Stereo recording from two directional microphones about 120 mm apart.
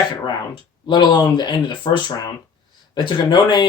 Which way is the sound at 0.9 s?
40° left (ahead or behind).